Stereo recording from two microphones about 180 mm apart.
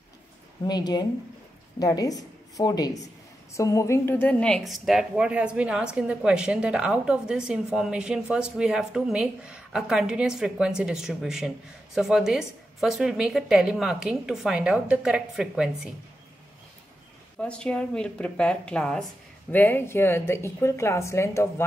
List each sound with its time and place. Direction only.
0.7 s a woman's voice: 25° left (ahead or behind); by 15.9 s centre (ahead or behind)
17.4 s speech: 5° left (ahead or behind)